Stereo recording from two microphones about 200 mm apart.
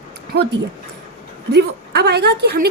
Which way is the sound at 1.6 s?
55° right (ahead or behind).